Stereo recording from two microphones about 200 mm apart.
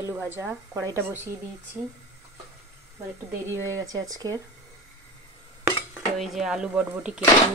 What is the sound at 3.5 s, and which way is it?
Speech, 15° right (ahead or behind).